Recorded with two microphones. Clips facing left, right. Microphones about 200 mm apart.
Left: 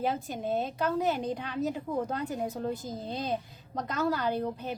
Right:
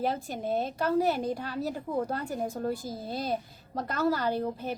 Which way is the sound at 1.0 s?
10° right (ahead or behind).